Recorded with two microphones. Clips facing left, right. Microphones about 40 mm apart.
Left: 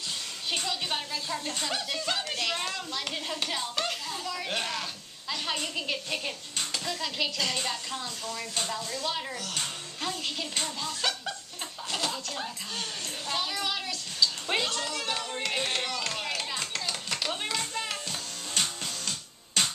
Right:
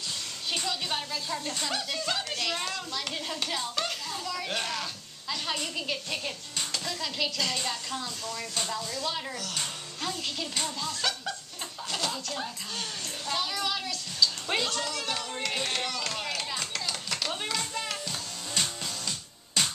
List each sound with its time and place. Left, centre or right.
0.5 s speech: centre
13.3 s a sound: centre
19.0 s music: left